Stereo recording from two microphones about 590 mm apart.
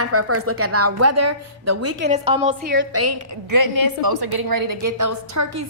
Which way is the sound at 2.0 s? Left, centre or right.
Centre.